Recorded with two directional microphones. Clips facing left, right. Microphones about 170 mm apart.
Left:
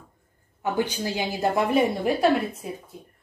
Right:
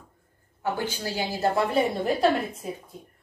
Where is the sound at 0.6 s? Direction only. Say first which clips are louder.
Left 3 dB; 15° left (ahead or behind).